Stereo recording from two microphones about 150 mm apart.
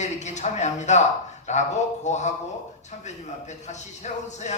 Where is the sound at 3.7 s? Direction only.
50° left (ahead or behind).